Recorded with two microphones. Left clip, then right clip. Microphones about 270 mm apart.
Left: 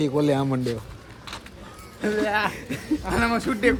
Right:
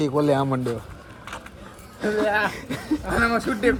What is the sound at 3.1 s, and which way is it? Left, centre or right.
Speech, centre.